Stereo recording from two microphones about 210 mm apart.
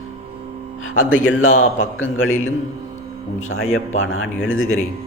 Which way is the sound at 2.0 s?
70° left (ahead or behind).